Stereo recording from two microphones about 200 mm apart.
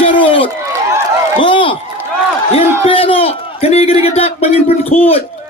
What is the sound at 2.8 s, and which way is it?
A man's voice, 25° left (ahead or behind).